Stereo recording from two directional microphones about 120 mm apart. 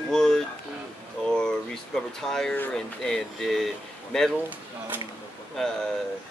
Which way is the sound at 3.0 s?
5° left (ahead or behind).